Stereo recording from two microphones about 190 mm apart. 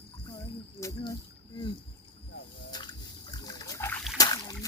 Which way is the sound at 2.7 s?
20° left (ahead or behind).